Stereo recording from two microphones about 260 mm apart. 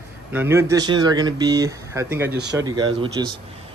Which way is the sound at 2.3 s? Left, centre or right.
Right.